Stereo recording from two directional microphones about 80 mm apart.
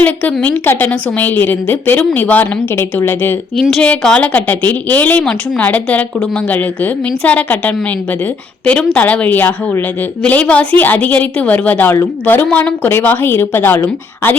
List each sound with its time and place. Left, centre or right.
0.0 s a woman's voice: left
3.6 s a woman's voice: centre
7.3 s a woman's voice: centre
8.8 s a woman's voice: centre